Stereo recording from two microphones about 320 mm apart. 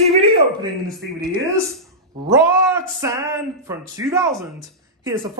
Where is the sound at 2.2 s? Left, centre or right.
Centre.